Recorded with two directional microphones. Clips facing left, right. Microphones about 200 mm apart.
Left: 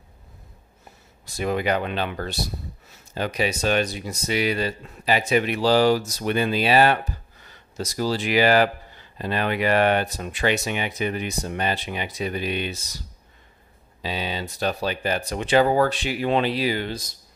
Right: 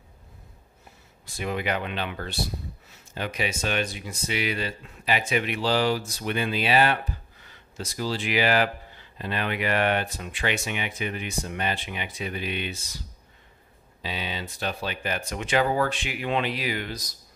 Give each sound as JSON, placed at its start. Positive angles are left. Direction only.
{"t": 1.2, "sound": "speech", "side_deg": 40}
{"t": 14.0, "sound": "speech", "side_deg": 40}